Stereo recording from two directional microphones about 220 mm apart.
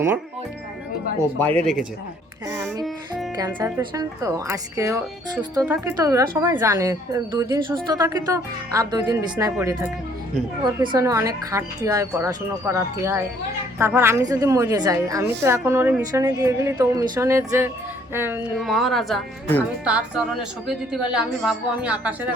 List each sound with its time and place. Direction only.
1.4 s a woman's voice: 5° left (ahead or behind)
3.3 s a woman's voice: 15° right (ahead or behind)